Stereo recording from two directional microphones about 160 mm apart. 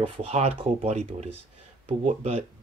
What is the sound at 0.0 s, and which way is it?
Speech, 35° right (ahead or behind).